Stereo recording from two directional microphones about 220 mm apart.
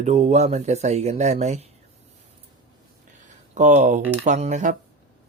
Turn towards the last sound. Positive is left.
turn(degrees=-35)  # may be behind; listen again after turning